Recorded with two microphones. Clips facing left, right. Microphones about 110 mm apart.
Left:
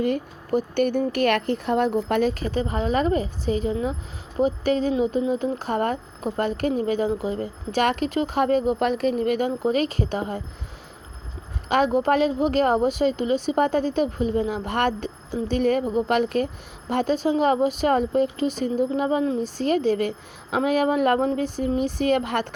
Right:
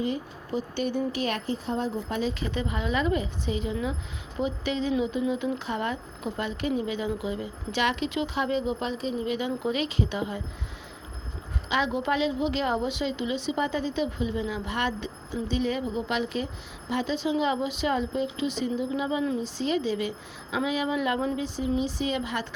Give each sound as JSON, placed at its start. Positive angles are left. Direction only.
{"t": 0.0, "sound": "speech", "side_deg": 55}
{"t": 2.4, "sound": "speech", "side_deg": 40}
{"t": 11.7, "sound": "speech", "side_deg": 45}